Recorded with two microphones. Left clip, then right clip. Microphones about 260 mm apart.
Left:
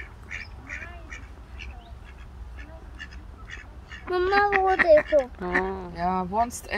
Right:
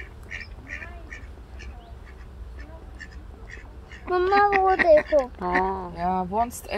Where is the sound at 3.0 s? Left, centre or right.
Left.